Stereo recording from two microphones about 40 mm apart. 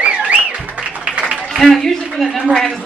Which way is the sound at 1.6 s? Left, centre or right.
Centre.